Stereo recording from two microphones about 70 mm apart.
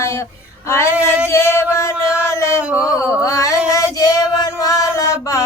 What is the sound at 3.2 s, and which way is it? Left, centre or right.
Female singing, left.